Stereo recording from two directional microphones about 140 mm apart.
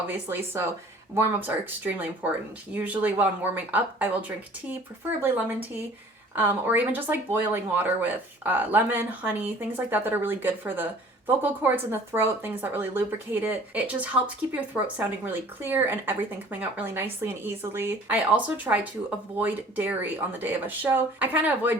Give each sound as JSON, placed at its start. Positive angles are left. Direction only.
{"t": 0.1, "sound": "speech", "side_deg": -15}
{"t": 6.3, "sound": "speech", "side_deg": -15}